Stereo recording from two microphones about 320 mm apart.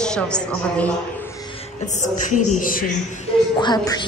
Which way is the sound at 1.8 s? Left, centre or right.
Left.